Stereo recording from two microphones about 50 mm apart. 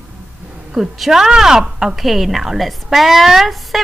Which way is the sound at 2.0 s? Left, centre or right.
Centre.